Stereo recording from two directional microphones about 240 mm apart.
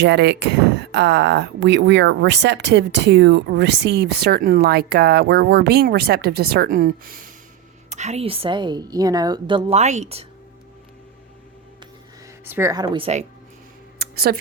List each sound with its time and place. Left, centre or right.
0.0 s a woman's voice: right
12.5 s speech: centre
14.0 s a sound: right